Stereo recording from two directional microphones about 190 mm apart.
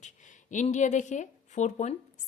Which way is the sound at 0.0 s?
40° left (ahead or behind).